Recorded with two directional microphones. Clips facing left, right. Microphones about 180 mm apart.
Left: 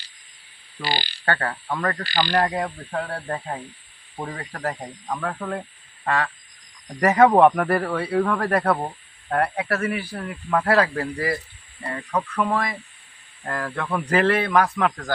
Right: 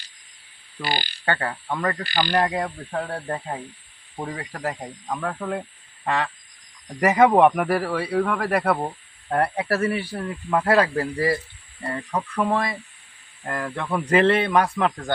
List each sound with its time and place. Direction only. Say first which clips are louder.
0.9 s speech: even; 50° right (ahead or behind)
1.2 s speech: left 1 dB; 10° right (ahead or behind)
2.6 s speech: even; centre (ahead or behind)
3.1 s speech: even; 10° right (ahead or behind)
6.1 s a man's voice: left 1 dB; 20° right (ahead or behind)
9.3 s a man's voice: right 1 dB; 25° right (ahead or behind)
10.2 s speech: even; 15° right (ahead or behind)
10.9 s a man's voice: right 3 dB; 25° right (ahead or behind)